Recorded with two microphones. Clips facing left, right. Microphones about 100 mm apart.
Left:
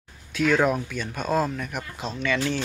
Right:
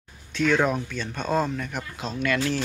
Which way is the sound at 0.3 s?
5° left (ahead or behind).